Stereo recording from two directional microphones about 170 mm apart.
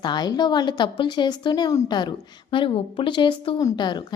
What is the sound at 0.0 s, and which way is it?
A woman's voice, 25° left (ahead or behind).